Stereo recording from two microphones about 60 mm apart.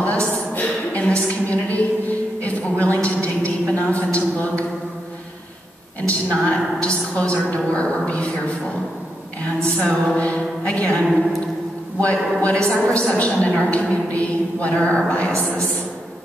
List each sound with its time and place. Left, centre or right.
0.0 s a sound: left
6.0 s a woman's voice: centre
9.8 s a woman's voice: left
12.0 s a woman's voice: left